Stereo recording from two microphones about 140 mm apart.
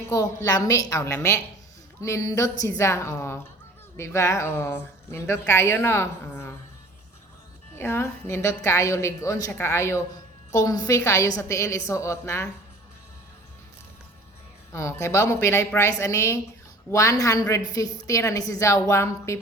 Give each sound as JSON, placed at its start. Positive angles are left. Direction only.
{"t": 0.1, "sound": "a woman's voice", "side_deg": 25}
{"t": 7.8, "sound": "a woman's voice", "side_deg": 15}
{"t": 14.7, "sound": "a woman's voice", "side_deg": 20}